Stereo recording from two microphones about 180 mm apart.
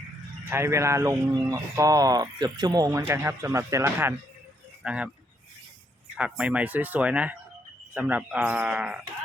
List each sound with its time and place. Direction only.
0.5 s speech: 15° right (ahead or behind)
6.1 s speech: 5° right (ahead or behind)